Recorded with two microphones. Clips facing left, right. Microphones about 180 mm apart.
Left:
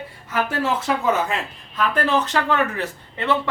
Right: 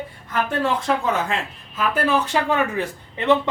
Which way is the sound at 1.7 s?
10° right (ahead or behind).